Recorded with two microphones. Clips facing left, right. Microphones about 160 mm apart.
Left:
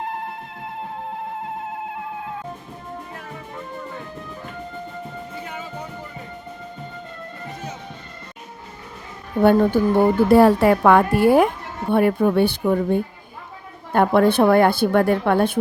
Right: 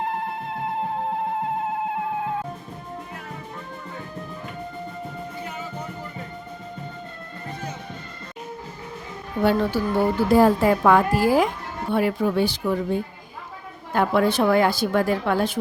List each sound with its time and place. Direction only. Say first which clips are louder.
9.4 s a woman's voice: left 6 dB; 55° left (ahead or behind)